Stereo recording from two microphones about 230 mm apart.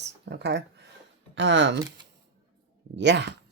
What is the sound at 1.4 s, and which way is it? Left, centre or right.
Speech, right.